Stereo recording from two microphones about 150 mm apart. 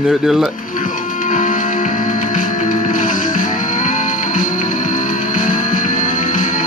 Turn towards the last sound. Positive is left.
turn(degrees=60)  # may be behind; listen again after turning